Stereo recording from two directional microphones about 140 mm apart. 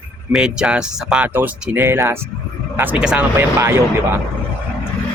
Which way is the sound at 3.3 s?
20° right (ahead or behind).